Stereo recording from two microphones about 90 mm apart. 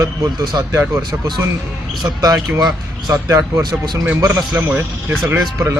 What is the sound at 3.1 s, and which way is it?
Speech, 35° right (ahead or behind).